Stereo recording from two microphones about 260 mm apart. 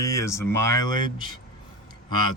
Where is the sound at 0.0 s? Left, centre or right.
Centre.